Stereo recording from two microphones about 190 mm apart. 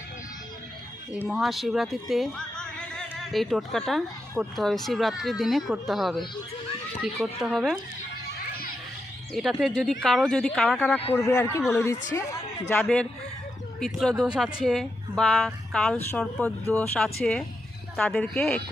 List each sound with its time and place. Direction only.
1.3 s speech: centre (ahead or behind)
8.4 s children playing: 50° left (ahead or behind)
9.3 s a man's voice: centre (ahead or behind)